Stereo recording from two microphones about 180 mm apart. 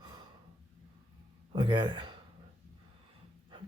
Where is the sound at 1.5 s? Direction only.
25° right (ahead or behind).